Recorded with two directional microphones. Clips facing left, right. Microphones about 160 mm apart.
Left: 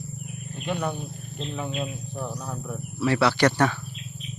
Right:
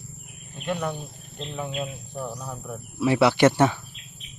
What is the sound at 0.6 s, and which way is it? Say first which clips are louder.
Speech: even; centre (ahead or behind).